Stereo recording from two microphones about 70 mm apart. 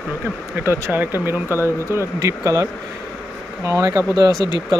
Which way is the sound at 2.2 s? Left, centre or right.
Right.